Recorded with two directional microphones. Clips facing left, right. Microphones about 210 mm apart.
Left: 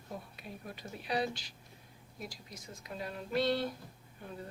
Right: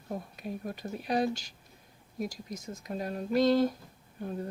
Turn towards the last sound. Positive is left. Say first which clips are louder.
# right 9 dB
turn(degrees=-40)  # may be behind; listen again after turning